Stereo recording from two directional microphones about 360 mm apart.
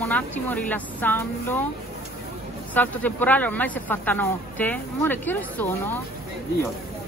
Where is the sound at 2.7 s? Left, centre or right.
Centre.